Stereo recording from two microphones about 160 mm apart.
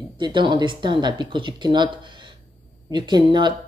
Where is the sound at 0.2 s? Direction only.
30° right (ahead or behind).